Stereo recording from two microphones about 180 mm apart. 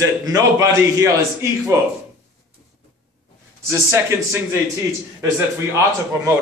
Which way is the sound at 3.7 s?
15° right (ahead or behind).